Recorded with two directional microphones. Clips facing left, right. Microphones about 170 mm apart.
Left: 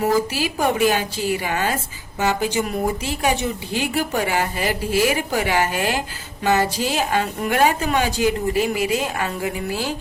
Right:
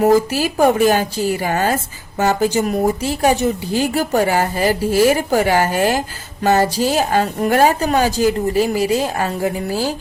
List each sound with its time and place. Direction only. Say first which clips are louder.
0.0 s a woman's voice: right 6 dB; 45° right (ahead or behind)